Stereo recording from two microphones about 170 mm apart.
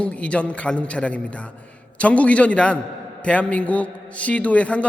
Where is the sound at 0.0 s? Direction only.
5° left (ahead or behind).